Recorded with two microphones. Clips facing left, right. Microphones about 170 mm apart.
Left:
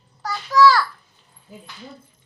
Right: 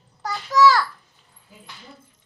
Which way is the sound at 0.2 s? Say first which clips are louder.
Left 2 dB; 20° right (ahead or behind).